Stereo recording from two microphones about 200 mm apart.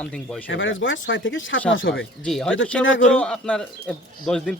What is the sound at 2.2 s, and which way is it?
Speech, 5° left (ahead or behind).